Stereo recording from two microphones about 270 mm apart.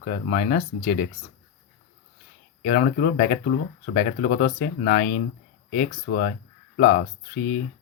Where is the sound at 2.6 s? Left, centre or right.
Left.